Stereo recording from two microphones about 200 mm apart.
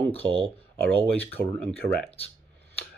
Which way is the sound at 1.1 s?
10° left (ahead or behind).